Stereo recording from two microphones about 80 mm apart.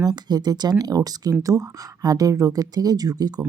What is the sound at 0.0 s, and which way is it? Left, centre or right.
Speech, right.